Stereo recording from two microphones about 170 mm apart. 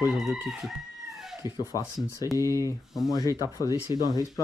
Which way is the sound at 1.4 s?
20° left (ahead or behind).